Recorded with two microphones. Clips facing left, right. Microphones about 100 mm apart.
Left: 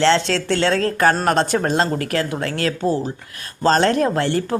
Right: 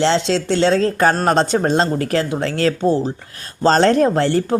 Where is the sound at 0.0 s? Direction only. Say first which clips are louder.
Even; 20° right (ahead or behind).